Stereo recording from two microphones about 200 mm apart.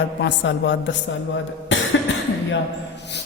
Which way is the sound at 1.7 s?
65° left (ahead or behind).